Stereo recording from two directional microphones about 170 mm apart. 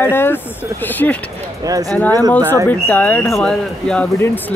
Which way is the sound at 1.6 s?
20° right (ahead or behind).